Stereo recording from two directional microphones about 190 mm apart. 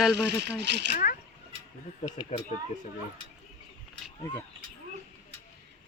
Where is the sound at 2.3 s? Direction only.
40° left (ahead or behind).